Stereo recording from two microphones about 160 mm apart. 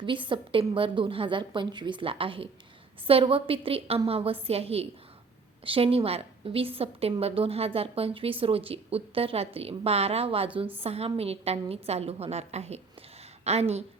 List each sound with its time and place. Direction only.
0.0 s a woman's voice: 30° right (ahead or behind)